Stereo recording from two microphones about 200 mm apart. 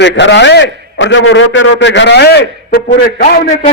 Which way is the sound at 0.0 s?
60° left (ahead or behind).